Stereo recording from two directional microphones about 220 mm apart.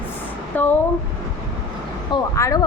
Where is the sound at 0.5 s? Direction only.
10° left (ahead or behind).